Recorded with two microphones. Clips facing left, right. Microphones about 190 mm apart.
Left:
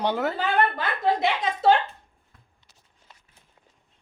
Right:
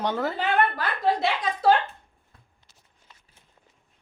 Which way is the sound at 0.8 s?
25° left (ahead or behind).